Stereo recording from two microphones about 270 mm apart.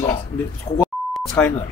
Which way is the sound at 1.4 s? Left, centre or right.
Centre.